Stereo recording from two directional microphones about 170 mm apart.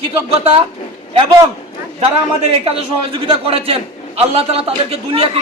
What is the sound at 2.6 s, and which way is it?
A man's voice, 35° right (ahead or behind).